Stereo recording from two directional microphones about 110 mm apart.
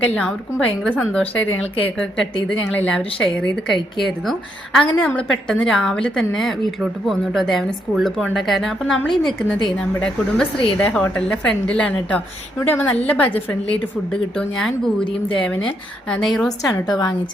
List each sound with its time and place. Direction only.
0.0 s a woman's voice: 10° left (ahead or behind)
16.6 s a woman's voice: 35° left (ahead or behind)